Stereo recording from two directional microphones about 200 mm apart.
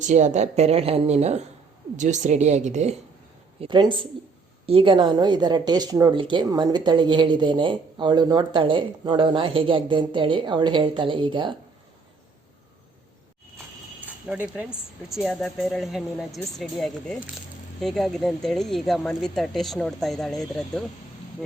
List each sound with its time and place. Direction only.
0.0 s a woman's voice: 35° right (ahead or behind)
3.6 s a woman's voice: 25° right (ahead or behind)
14.3 s speech: 5° right (ahead or behind)